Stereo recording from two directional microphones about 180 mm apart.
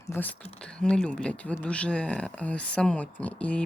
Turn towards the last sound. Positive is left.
turn(degrees=5)  # may be behind; listen again after turning